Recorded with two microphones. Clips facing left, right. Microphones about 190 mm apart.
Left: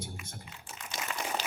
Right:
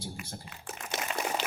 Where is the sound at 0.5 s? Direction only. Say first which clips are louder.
Right 6 dB; 55° right (ahead or behind).